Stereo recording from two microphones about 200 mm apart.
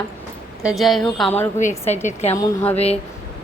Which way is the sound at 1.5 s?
35° left (ahead or behind).